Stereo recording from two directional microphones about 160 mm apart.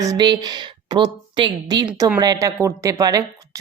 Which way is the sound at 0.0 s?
25° right (ahead or behind).